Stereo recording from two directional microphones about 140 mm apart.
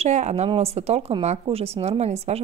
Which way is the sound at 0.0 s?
55° right (ahead or behind).